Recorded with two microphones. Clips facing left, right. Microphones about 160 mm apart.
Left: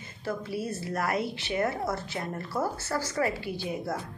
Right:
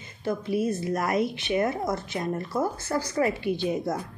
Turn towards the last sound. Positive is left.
turn(degrees=-20)  # may be behind; listen again after turning